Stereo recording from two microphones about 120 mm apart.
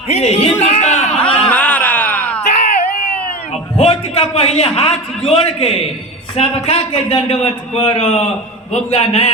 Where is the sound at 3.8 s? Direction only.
55° left (ahead or behind).